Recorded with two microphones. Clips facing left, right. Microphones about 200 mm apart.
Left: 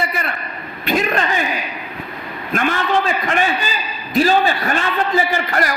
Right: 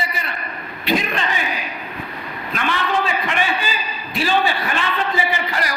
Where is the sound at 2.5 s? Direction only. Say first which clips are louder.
Left 6 dB; 50° left (ahead or behind).